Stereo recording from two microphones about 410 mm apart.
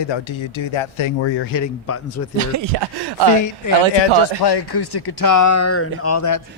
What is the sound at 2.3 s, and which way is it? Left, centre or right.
Speech, right.